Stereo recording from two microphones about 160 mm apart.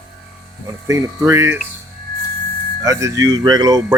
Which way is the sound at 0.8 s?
20° right (ahead or behind).